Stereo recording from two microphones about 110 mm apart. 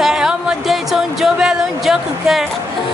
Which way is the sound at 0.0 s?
5° right (ahead or behind).